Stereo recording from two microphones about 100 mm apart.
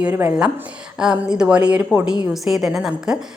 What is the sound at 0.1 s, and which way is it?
Speech, 25° right (ahead or behind).